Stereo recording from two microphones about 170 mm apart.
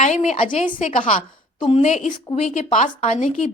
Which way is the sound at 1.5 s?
30° left (ahead or behind).